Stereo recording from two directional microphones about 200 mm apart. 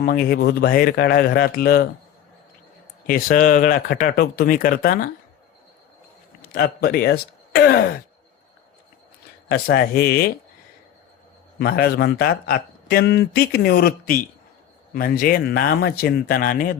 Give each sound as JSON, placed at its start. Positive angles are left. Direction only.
{"t": 0.0, "sound": "a man's voice", "side_deg": 50}
{"t": 3.1, "sound": "a man's voice", "side_deg": 45}
{"t": 6.5, "sound": "a man's voice", "side_deg": 50}
{"t": 9.5, "sound": "a man's voice", "side_deg": 50}
{"t": 11.6, "sound": "a man's voice", "side_deg": 50}